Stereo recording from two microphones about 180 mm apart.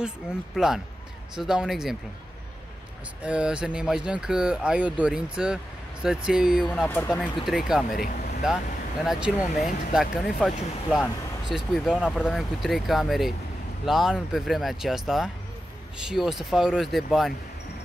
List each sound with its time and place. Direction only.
0.5 s speech: centre (ahead or behind)
3.2 s speech: 5° right (ahead or behind)
6.7 s speech: 10° left (ahead or behind)
7.4 s speech: centre (ahead or behind)
9.0 s speech: centre (ahead or behind)